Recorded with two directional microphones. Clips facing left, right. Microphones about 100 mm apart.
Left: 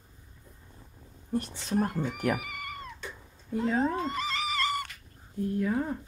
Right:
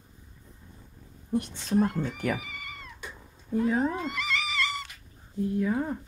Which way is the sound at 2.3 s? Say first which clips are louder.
Left 2 dB; 55° left (ahead or behind).